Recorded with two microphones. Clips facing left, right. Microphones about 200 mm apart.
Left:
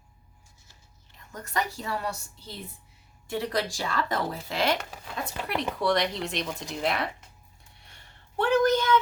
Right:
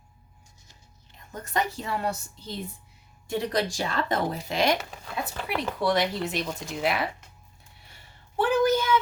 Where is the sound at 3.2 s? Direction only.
20° right (ahead or behind).